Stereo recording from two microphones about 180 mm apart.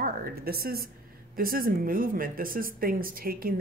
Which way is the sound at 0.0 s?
60° right (ahead or behind).